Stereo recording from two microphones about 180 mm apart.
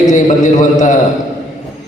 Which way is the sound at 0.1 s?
40° left (ahead or behind).